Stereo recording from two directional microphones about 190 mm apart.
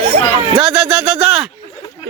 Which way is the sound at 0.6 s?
5° right (ahead or behind).